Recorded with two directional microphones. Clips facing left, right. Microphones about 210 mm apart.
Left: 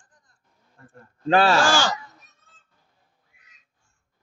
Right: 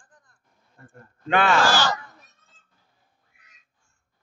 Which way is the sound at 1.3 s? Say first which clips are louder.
Left 3 dB; 35° left (ahead or behind).